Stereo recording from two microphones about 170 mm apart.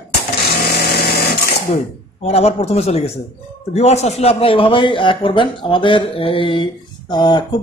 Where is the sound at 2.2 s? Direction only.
35° left (ahead or behind).